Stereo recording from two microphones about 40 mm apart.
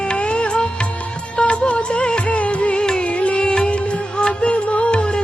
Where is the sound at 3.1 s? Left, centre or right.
Left.